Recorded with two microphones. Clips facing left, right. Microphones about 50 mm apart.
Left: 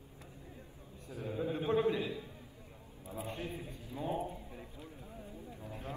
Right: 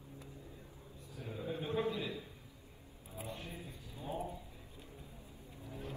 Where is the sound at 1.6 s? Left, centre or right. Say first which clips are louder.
Left 5 dB; left.